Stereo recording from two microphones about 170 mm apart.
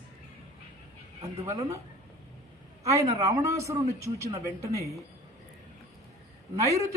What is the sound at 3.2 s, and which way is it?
A man's voice, 20° right (ahead or behind).